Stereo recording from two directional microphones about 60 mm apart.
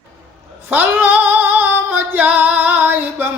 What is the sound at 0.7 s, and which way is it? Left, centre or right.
Female singing, right.